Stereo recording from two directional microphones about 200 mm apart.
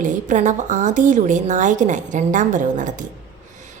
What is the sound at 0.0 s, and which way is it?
A woman's voice, 40° right (ahead or behind).